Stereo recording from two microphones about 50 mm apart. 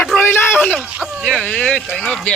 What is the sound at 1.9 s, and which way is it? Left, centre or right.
Speech, centre.